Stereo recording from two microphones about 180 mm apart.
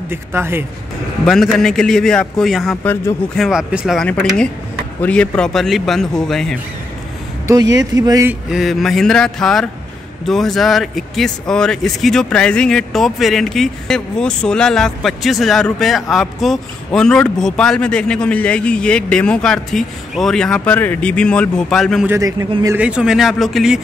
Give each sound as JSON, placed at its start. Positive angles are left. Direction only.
{"t": 0.1, "sound": "speech", "side_deg": -15}
{"t": 1.2, "sound": "speech", "side_deg": 0}
{"t": 3.4, "sound": "speech", "side_deg": -5}
{"t": 7.9, "sound": "speech", "side_deg": -20}
{"t": 8.3, "sound": "speech", "side_deg": -5}
{"t": 22.0, "sound": "speech", "side_deg": -15}
{"t": 22.8, "sound": "speech", "side_deg": -5}